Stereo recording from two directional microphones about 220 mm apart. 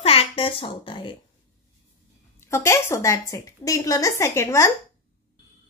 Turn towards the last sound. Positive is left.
turn(degrees=15)  # may be behind; listen again after turning